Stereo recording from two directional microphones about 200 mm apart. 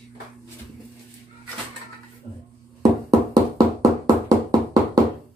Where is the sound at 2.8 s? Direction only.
20° right (ahead or behind).